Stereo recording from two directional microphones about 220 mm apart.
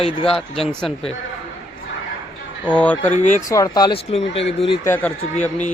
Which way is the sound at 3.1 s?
35° left (ahead or behind).